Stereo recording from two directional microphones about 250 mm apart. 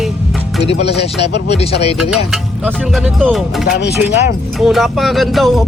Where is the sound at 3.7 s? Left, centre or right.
Left.